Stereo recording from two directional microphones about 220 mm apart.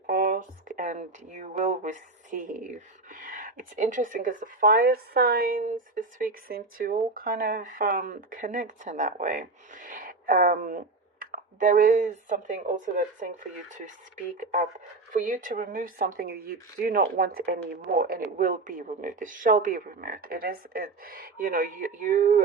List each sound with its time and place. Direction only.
0.1 s speech: 40° right (ahead or behind)
15.1 s speech: 35° right (ahead or behind)